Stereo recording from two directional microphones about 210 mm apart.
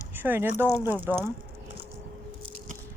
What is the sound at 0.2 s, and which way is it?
Speech, 10° right (ahead or behind).